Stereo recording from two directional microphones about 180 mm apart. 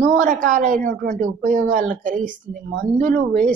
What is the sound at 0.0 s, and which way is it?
A woman's voice, 45° right (ahead or behind).